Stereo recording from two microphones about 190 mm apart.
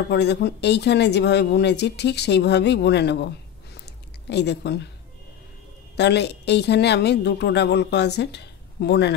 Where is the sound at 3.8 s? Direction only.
60° left (ahead or behind).